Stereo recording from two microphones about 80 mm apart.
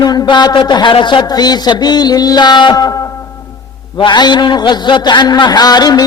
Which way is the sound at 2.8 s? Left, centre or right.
Left.